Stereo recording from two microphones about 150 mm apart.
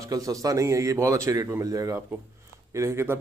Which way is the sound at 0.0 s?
25° right (ahead or behind).